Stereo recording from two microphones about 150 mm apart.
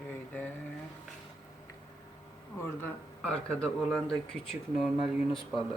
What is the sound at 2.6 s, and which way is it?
Speech, 20° left (ahead or behind).